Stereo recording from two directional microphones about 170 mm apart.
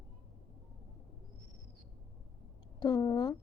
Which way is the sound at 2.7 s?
25° left (ahead or behind).